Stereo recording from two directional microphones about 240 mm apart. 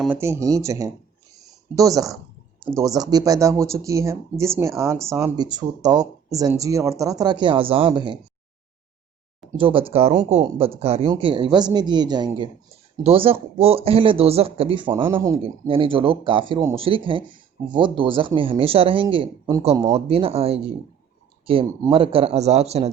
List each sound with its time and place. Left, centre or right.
0.0 s speech: centre
9.5 s speech: right